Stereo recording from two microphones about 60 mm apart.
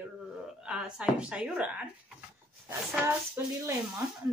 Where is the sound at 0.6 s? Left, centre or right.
Centre.